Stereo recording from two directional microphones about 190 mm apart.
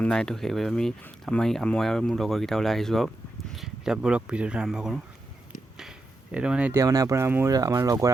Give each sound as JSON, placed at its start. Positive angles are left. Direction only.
{"t": 0.0, "sound": "speech", "side_deg": 5}
{"t": 6.3, "sound": "speech", "side_deg": -5}